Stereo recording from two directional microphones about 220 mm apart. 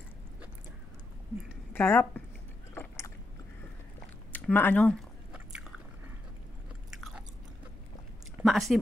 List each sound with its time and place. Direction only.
1.7 s speech: 10° left (ahead or behind)
2.7 s chewing: 10° left (ahead or behind)
4.3 s chewing: 10° left (ahead or behind)
7.0 s chewing: centre (ahead or behind)
8.4 s speech: centre (ahead or behind)